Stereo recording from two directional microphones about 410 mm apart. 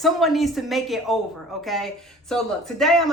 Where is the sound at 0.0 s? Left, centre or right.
Centre.